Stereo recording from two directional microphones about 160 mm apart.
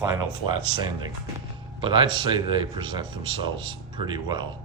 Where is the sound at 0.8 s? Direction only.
25° right (ahead or behind).